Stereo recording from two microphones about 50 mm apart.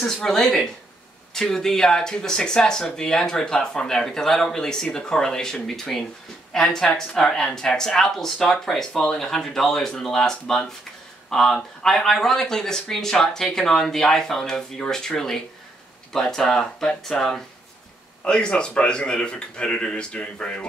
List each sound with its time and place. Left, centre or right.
0.0 s speech: centre
18.2 s speech: centre